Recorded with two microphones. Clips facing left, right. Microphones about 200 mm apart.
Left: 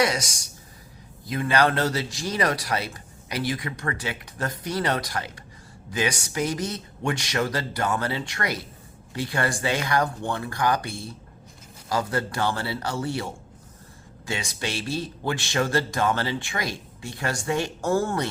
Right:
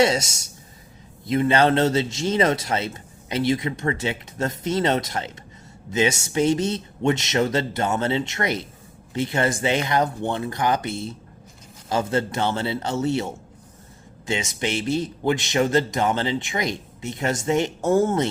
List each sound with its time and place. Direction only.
0.0 s a man's voice: 25° right (ahead or behind)